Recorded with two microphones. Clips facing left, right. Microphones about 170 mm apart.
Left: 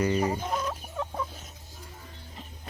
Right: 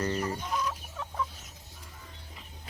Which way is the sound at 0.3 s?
50° left (ahead or behind).